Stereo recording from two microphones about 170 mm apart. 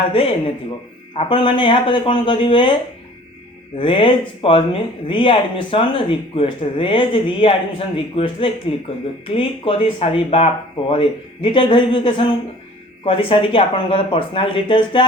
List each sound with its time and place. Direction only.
0.1 s speech: 35° left (ahead or behind)
3.8 s speech: 30° left (ahead or behind)